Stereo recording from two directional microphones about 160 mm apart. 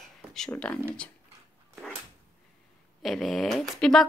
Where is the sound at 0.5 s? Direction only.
5° left (ahead or behind).